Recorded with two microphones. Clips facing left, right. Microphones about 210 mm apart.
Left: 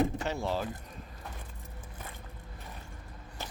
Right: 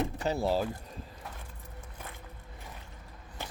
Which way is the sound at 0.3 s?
35° right (ahead or behind).